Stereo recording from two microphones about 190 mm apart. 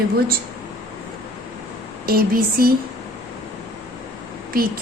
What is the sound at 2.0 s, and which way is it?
Speech, 50° right (ahead or behind).